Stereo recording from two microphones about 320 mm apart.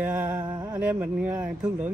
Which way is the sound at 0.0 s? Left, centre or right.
Centre.